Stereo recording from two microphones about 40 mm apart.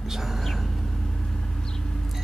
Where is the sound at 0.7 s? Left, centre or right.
Centre.